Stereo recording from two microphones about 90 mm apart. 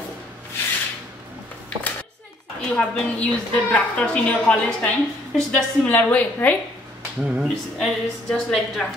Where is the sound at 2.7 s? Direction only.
15° left (ahead or behind).